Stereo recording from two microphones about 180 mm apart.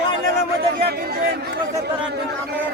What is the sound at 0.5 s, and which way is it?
Speech, 65° right (ahead or behind).